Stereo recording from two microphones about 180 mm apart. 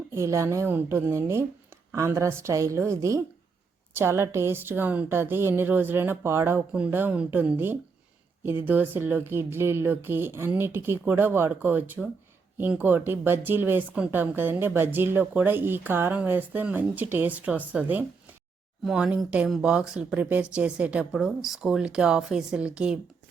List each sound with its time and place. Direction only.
0.1 s speech: 15° right (ahead or behind)